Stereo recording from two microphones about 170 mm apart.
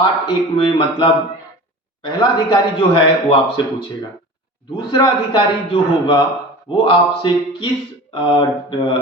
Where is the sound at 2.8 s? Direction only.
30° left (ahead or behind).